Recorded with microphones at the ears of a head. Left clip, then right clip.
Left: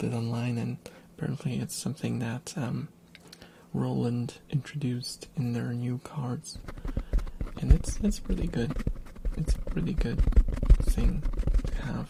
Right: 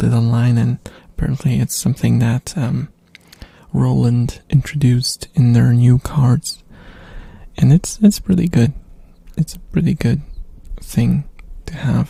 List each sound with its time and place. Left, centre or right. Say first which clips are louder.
0.0 s speech: right 13 dB; right
10.2 s a sound: left 16 dB; left
10.9 s speech: right 15 dB; right